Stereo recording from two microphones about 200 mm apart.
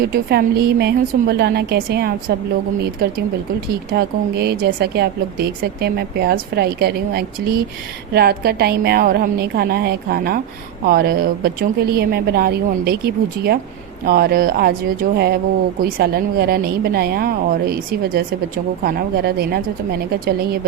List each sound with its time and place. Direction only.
0.0 s a woman's voice: 50° right (ahead or behind)
3.7 s a woman's voice: 55° right (ahead or behind)